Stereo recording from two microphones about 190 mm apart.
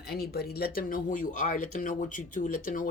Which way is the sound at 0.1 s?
55° left (ahead or behind).